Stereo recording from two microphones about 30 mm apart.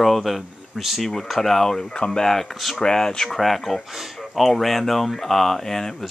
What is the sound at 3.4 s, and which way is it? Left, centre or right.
Speech, centre.